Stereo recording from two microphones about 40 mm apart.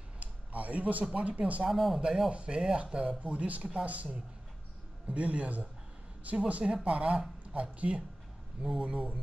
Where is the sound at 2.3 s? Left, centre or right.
Right.